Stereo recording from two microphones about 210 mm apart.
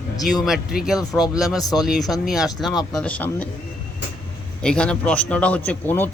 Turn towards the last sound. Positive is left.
turn(degrees=10)  # may be behind; listen again after turning